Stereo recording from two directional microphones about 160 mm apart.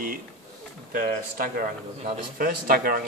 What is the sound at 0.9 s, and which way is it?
A man's voice, 60° right (ahead or behind).